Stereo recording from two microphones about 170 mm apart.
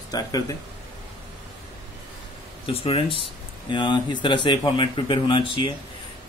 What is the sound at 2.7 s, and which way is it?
Speech, 35° left (ahead or behind).